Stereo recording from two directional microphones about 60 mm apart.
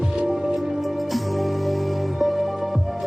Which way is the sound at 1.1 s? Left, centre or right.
Centre.